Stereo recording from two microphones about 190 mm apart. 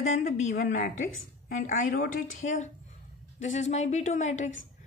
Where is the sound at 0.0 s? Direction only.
40° left (ahead or behind).